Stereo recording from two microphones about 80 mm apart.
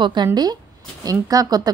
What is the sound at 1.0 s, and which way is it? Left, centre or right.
Speech, right.